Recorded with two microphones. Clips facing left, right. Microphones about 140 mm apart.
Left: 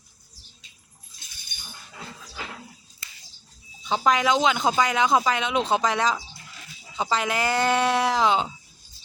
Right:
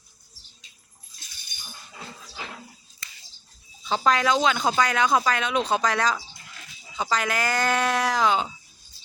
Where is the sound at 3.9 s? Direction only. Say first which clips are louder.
Left 1 dB; 15° left (ahead or behind).